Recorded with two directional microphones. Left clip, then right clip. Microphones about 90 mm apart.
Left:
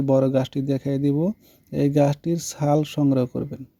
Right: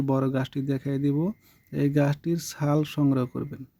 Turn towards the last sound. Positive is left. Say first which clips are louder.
# left 4 dB
turn(degrees=25)  # may be behind; listen again after turning